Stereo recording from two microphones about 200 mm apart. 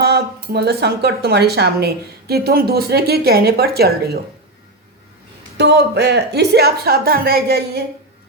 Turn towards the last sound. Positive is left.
turn(degrees=-50)  # may be behind; listen again after turning